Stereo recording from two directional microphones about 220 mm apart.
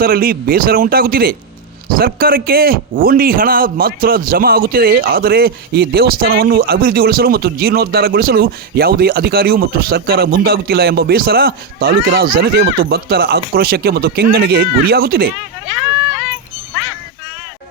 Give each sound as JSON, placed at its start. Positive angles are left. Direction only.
{"t": 0.0, "sound": "a man's voice", "side_deg": -40}